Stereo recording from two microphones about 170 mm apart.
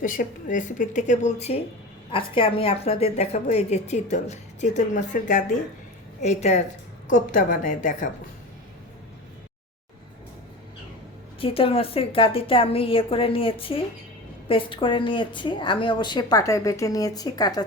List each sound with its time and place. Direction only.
0.0 s a woman's voice: 50° left (ahead or behind)
11.3 s a woman's voice: 35° left (ahead or behind)